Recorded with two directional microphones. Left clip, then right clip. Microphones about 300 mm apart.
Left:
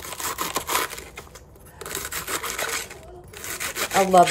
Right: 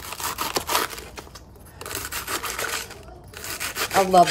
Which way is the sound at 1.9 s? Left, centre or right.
Centre.